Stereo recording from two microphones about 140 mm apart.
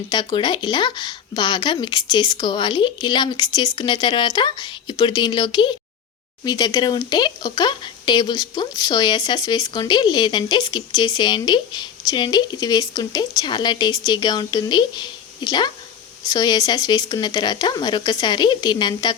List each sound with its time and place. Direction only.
0.1 s speech: 35° left (ahead or behind)